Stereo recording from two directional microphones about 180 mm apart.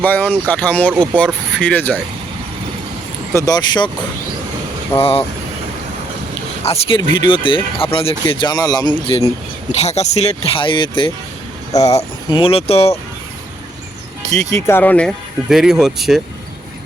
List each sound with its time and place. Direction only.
0.0 s speech: 10° left (ahead or behind)
3.3 s speech: 20° left (ahead or behind)
6.6 s speech: 35° left (ahead or behind)
14.5 s speech: 10° left (ahead or behind)